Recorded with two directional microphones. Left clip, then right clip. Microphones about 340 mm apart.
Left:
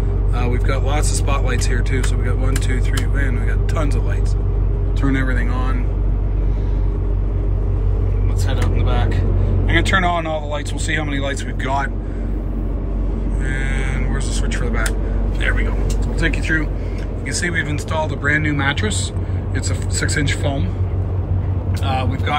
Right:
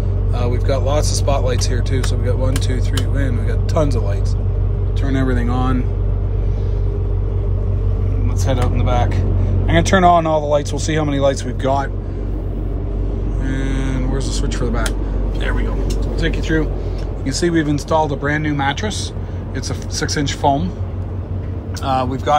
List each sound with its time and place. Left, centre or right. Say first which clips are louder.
0.4 s speech: right 3 dB; centre
5.0 s speech: right 1 dB; centre
8.7 s speech: right 4 dB; right
13.5 s speech: right 1 dB; centre
20.0 s speech: right 2 dB; centre
21.8 s speech: right 5 dB; centre